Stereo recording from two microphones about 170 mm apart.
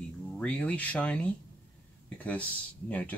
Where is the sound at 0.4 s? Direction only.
5° left (ahead or behind).